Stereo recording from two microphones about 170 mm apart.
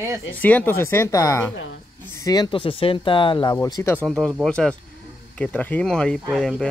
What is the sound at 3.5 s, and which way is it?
Speech, 20° left (ahead or behind).